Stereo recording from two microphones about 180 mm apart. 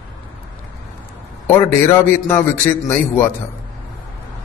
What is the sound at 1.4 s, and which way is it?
A man's voice, 15° left (ahead or behind).